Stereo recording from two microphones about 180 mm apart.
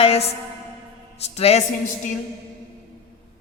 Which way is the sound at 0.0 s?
35° left (ahead or behind).